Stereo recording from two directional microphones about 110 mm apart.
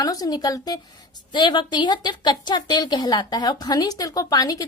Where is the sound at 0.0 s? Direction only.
35° left (ahead or behind).